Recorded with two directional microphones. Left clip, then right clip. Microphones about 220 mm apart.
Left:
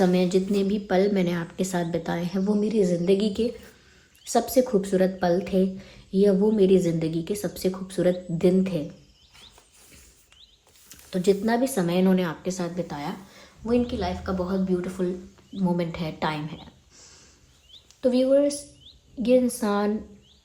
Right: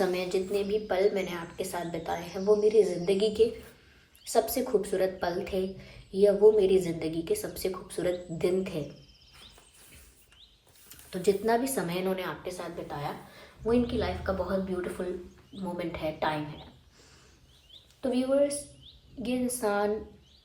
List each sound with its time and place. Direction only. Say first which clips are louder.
0.0 s speech: left 6 dB; 50° left (ahead or behind)
10.8 s speech: left 5 dB; 45° left (ahead or behind)
13.7 s speech: left 2 dB; 30° left (ahead or behind)
18.0 s speech: left 6 dB; 50° left (ahead or behind)